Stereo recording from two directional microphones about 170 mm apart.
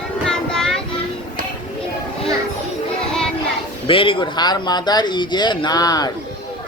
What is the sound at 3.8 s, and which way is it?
Speech, 30° left (ahead or behind).